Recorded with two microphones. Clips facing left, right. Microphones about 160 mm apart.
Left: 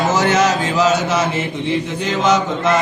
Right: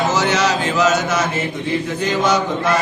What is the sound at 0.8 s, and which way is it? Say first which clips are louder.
Mantra: left 1 dB; 30° left (ahead or behind).